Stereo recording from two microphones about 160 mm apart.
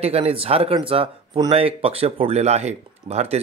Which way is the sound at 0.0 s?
35° right (ahead or behind).